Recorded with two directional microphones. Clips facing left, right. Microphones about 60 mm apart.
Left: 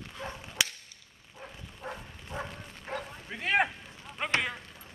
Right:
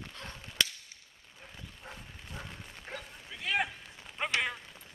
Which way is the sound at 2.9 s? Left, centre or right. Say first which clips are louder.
Left 7 dB; centre.